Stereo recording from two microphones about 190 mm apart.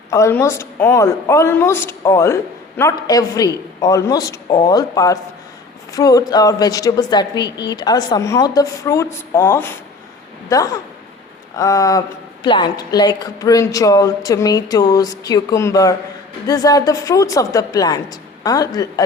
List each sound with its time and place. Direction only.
0.1 s a woman's voice: 15° left (ahead or behind)